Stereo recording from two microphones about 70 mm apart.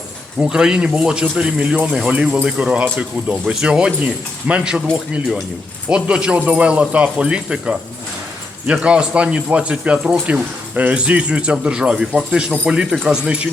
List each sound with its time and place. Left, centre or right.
0.3 s speech: centre